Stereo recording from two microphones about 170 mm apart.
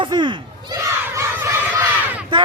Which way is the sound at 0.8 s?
15° right (ahead or behind).